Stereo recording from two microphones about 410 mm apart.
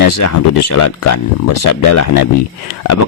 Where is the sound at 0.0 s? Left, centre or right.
Left.